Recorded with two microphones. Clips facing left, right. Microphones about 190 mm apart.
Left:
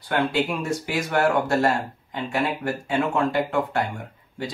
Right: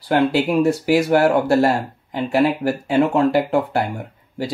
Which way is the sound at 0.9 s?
35° right (ahead or behind).